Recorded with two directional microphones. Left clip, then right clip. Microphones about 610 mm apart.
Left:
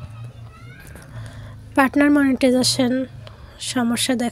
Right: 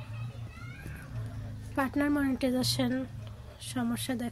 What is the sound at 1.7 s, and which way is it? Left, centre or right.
Speech, centre.